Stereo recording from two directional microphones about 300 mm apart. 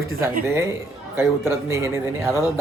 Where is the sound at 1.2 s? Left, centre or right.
Centre.